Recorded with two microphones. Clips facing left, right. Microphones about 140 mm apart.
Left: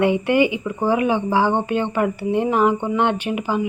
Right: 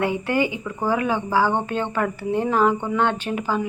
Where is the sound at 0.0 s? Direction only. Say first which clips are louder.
Left 5 dB; 15° left (ahead or behind).